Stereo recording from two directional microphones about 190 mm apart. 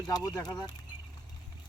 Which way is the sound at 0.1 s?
20° left (ahead or behind).